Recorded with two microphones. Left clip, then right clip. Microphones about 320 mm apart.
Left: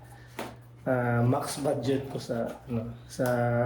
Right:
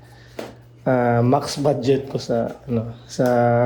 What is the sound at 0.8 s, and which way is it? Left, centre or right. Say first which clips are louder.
Speech: right 10 dB; right.